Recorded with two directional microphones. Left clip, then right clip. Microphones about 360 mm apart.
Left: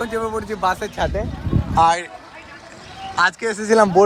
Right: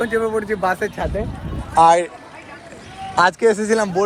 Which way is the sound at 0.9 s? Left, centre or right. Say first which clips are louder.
Left 2 dB; centre.